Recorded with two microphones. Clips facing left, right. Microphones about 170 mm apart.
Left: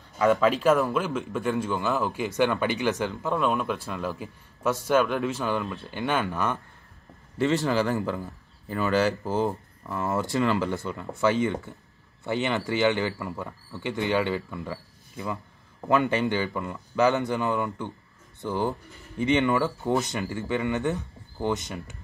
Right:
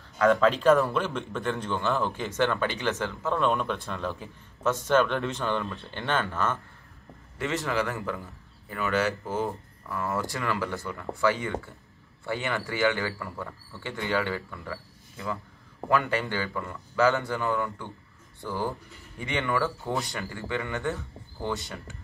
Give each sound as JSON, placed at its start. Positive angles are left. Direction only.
{"t": 0.2, "sound": "speech", "side_deg": 5}
{"t": 7.3, "sound": "a man's voice", "side_deg": 30}